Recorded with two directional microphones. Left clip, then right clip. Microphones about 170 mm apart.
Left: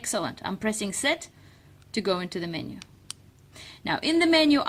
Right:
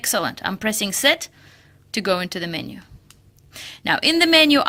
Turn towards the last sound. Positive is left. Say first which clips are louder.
# right 6 dB
turn(degrees=-20)  # may be behind; listen again after turning